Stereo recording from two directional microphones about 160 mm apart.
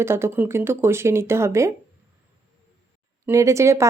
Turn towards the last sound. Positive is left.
turn(degrees=-20)  # may be behind; listen again after turning